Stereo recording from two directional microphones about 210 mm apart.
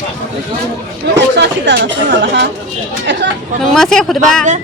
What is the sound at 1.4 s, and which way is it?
Speech, 55° right (ahead or behind).